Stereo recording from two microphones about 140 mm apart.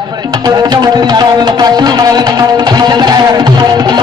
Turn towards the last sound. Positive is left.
turn(degrees=-30)  # may be behind; listen again after turning